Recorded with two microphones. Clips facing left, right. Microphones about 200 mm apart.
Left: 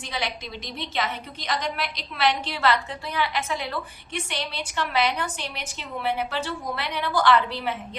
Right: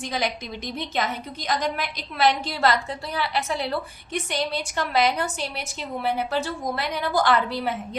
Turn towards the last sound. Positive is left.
turn(degrees=-40)  # may be behind; listen again after turning